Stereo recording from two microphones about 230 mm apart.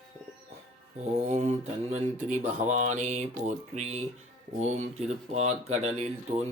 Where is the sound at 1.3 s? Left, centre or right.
Right.